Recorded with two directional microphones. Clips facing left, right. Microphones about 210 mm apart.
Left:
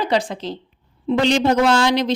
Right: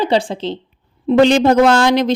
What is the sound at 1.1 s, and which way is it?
Speech, 50° right (ahead or behind).